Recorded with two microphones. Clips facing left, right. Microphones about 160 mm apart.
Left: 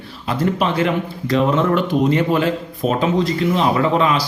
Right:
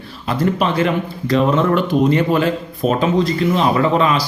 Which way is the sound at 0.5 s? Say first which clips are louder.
Right 1 dB; 15° left (ahead or behind).